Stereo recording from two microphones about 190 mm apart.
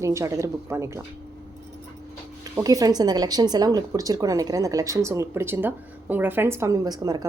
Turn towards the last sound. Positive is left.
turn(degrees=-20)  # may be behind; listen again after turning